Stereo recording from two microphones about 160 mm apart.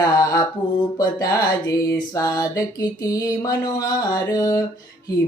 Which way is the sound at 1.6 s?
20° left (ahead or behind).